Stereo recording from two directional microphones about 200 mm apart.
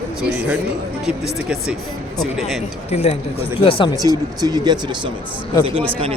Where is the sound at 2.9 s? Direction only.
35° left (ahead or behind).